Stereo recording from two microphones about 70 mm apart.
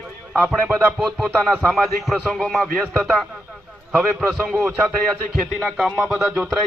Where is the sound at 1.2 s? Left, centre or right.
Centre.